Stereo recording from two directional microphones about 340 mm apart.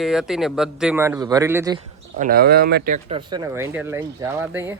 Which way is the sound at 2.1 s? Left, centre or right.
Right.